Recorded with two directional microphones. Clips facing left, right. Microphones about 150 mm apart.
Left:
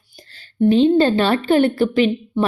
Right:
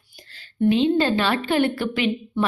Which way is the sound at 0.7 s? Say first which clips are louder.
Left 5 dB; 35° left (ahead or behind).